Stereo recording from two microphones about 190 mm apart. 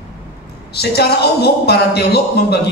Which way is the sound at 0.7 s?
60° left (ahead or behind).